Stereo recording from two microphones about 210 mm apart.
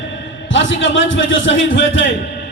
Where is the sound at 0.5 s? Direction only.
65° left (ahead or behind).